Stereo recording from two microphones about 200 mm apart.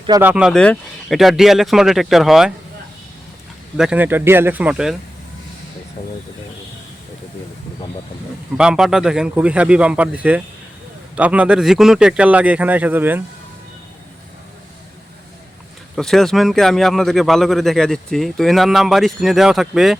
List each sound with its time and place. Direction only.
0.2 s a man's voice: 5° right (ahead or behind)
3.8 s speech: 5° right (ahead or behind)
6.0 s speech: 35° left (ahead or behind)
8.5 s a man's voice: 5° right (ahead or behind)
16.0 s a man's voice: centre (ahead or behind)